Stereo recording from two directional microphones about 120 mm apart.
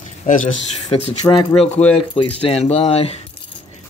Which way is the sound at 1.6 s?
5° left (ahead or behind).